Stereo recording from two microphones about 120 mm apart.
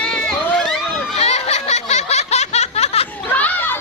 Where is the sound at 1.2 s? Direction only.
60° left (ahead or behind).